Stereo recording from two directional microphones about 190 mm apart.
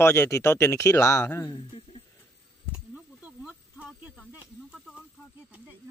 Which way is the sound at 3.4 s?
5° right (ahead or behind).